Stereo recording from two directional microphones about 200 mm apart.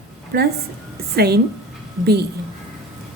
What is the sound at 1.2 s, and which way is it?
Speech, 50° right (ahead or behind).